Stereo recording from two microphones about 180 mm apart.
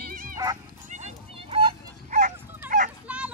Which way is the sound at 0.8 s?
40° right (ahead or behind).